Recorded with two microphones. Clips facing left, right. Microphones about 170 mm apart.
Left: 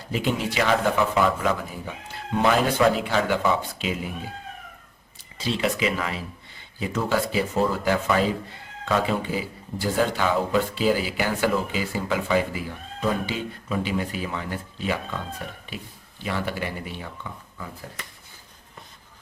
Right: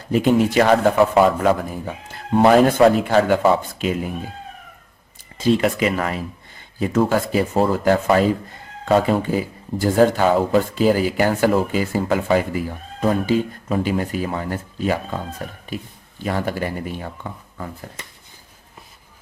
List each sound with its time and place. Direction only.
0.1 s speech: 45° right (ahead or behind)
5.4 s speech: 50° right (ahead or behind)